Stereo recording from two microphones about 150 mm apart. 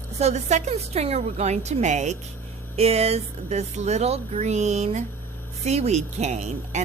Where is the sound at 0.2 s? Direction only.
45° right (ahead or behind).